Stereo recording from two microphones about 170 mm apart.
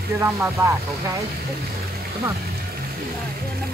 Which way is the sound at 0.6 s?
15° right (ahead or behind).